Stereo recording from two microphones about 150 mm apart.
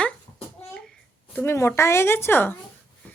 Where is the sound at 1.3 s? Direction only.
15° left (ahead or behind).